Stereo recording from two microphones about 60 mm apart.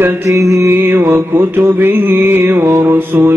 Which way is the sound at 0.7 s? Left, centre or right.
Right.